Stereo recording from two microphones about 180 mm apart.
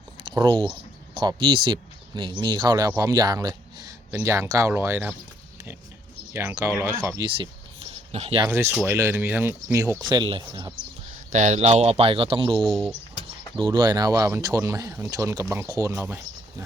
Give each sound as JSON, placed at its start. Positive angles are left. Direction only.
{"t": 0.2, "sound": "a sound", "side_deg": -25}
{"t": 1.1, "sound": "speech", "side_deg": -25}
{"t": 6.3, "sound": "speech", "side_deg": -15}
{"t": 7.3, "sound": "speech", "side_deg": -30}
{"t": 8.4, "sound": "speech", "side_deg": -15}
{"t": 11.3, "sound": "speech", "side_deg": -40}
{"t": 12.6, "sound": "speech", "side_deg": 0}
{"t": 13.7, "sound": "speech", "side_deg": -20}